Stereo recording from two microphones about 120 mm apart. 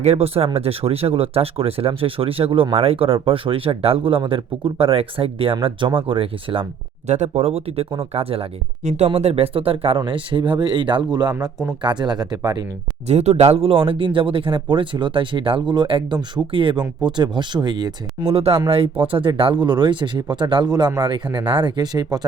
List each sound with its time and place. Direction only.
0.0 s speech: 60° right (ahead or behind)
7.1 s speech: 65° right (ahead or behind)
8.8 s speech: 70° right (ahead or behind); by 10.0 s 55° right (ahead or behind)
10.0 s speech: 40° right (ahead or behind)
13.1 s speech: 65° right (ahead or behind); by 18.3 s 35° right (ahead or behind)
18.3 s speech: 55° right (ahead or behind); by 22.3 s 35° right (ahead or behind)